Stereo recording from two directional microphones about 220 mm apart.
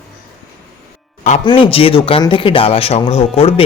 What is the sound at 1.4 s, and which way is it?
Speech, 25° left (ahead or behind).